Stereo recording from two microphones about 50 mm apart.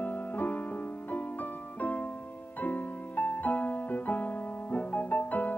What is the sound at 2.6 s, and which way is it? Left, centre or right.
Music, left.